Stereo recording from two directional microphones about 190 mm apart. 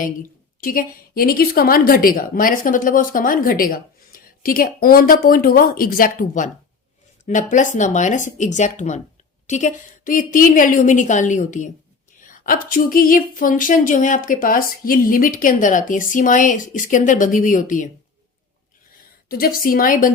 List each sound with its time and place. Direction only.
0.0 s a woman's voice: 45° left (ahead or behind)
19.3 s a woman's voice: 50° left (ahead or behind)